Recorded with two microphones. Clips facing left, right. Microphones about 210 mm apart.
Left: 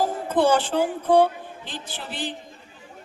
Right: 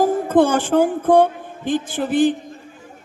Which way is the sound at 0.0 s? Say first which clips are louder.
Right 6 dB; 50° right (ahead or behind).